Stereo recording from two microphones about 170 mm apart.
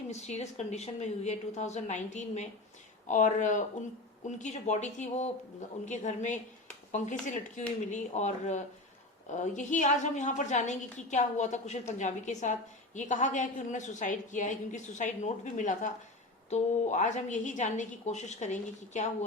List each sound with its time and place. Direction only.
0.1 s a woman's voice: 40° left (ahead or behind)